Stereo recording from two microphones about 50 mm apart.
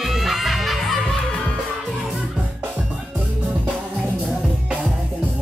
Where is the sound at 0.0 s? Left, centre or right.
Centre.